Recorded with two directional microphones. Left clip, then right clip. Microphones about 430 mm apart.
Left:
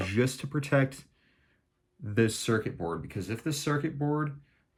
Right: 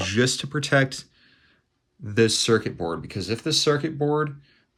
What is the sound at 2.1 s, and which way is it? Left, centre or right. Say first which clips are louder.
Speech: right 8 dB; centre.